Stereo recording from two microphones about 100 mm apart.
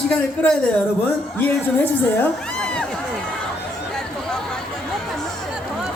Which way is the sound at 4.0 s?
5° left (ahead or behind).